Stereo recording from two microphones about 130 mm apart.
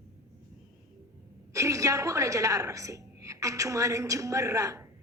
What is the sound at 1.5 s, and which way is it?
A woman's voice, 25° right (ahead or behind).